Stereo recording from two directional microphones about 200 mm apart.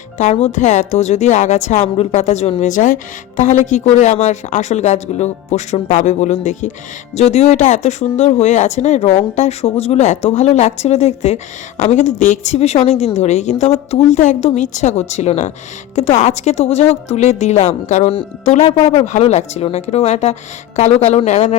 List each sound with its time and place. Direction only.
0.2 s a woman's voice: 35° left (ahead or behind)